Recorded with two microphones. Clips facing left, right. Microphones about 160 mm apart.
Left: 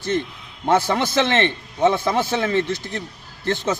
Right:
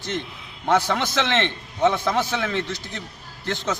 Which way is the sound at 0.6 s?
15° left (ahead or behind).